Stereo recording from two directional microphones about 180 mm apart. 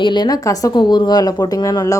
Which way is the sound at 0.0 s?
25° left (ahead or behind).